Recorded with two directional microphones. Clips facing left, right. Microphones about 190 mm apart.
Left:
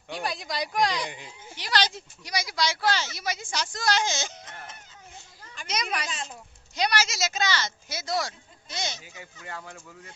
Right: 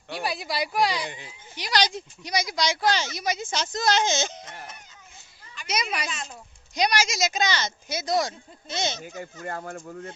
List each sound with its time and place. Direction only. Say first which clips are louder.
0.1 s speech: right 2 dB; 10° right (ahead or behind); by 9.0 s 25° right (ahead or behind)
9.0 s speech: right 9 dB; 45° right (ahead or behind)